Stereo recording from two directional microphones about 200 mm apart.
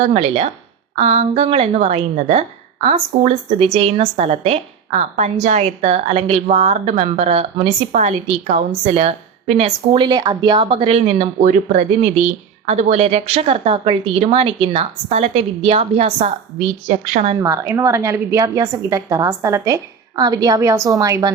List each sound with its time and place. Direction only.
0.0 s a woman's voice: 30° right (ahead or behind)
17.4 s a woman's voice: 15° right (ahead or behind)